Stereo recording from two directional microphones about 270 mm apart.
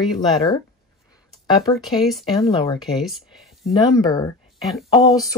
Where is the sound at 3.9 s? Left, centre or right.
Centre.